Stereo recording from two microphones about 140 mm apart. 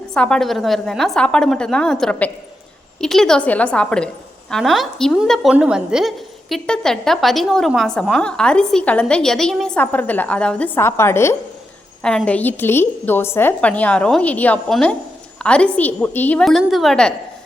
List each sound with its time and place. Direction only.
0.1 s a woman's voice: 5° left (ahead or behind)
12.0 s a woman's voice: 5° left (ahead or behind)